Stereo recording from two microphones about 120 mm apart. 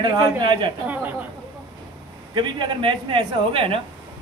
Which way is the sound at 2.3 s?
40° right (ahead or behind).